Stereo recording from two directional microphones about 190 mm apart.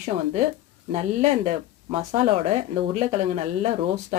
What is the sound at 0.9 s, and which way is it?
Speech, 35° right (ahead or behind).